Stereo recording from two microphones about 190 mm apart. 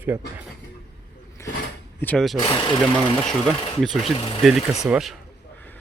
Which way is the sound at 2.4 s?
25° left (ahead or behind).